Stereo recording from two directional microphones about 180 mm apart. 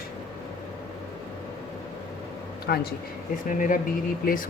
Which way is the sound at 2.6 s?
60° left (ahead or behind).